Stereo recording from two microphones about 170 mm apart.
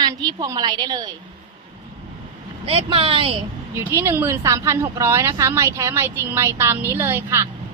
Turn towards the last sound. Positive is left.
turn(degrees=-15)  # may be behind; listen again after turning